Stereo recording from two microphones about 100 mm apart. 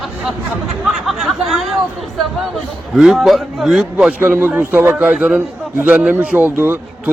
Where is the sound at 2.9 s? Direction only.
5° right (ahead or behind); by 5.1 s 20° right (ahead or behind).